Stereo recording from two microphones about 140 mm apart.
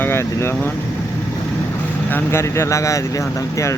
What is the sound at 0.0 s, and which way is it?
Speech, 15° left (ahead or behind).